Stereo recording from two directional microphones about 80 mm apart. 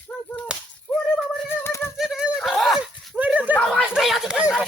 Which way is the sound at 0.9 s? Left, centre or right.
Centre.